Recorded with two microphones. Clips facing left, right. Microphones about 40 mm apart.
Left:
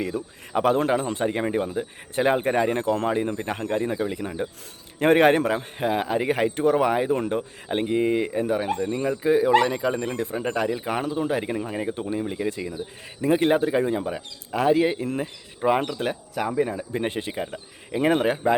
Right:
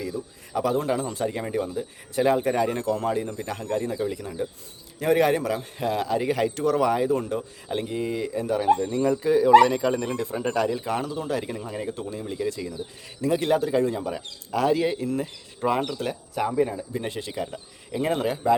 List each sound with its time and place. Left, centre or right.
0.0 s speech: left
5.8 s speech: left
9.6 s speech: centre; by 18.5 s left